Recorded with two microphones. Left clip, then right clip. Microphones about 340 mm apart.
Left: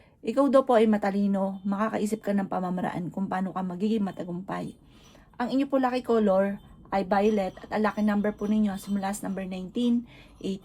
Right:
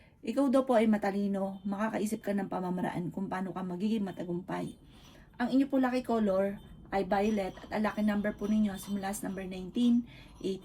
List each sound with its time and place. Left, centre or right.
0.3 s speech: left